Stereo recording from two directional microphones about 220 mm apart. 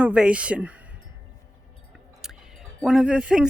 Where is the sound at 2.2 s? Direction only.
Centre (ahead or behind).